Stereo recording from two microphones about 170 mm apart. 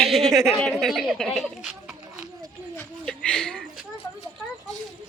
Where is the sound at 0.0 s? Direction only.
Centre (ahead or behind).